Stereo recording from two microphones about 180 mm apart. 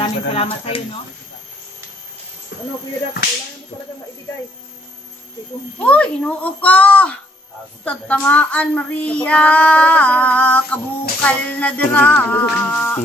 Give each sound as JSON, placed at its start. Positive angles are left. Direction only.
{"t": 0.0, "sound": "speech", "side_deg": 35}
{"t": 5.9, "sound": "child singing", "side_deg": 5}